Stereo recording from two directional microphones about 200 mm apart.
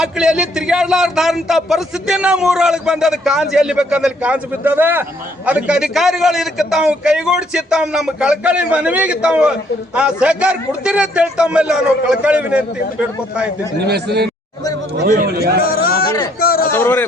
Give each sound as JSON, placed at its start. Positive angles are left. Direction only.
{"t": 0.0, "sound": "a man's voice", "side_deg": -5}
{"t": 13.8, "sound": "a man's voice", "side_deg": -55}
{"t": 15.6, "sound": "a man's voice", "side_deg": 50}
{"t": 16.7, "sound": "a man's voice", "side_deg": 10}